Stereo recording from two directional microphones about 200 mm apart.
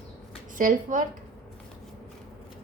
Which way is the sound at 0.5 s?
40° right (ahead or behind).